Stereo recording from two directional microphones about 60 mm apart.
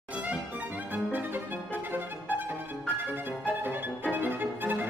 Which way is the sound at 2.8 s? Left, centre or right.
Right.